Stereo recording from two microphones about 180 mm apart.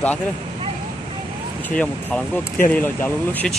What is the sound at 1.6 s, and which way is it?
Speech, 10° left (ahead or behind).